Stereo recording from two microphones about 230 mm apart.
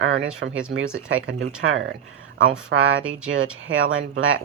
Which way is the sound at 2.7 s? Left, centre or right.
Right.